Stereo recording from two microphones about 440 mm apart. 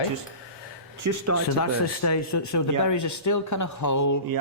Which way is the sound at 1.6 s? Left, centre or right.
Left.